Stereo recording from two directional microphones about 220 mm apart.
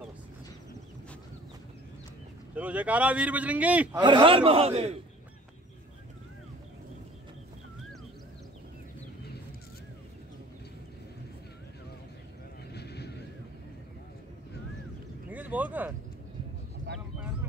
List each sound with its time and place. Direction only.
2.5 s a man's voice: 5° right (ahead or behind)
4.0 s a man's voice: 20° right (ahead or behind)
12.7 s horse: 50° left (ahead or behind)
15.2 s a sound: 5° right (ahead or behind)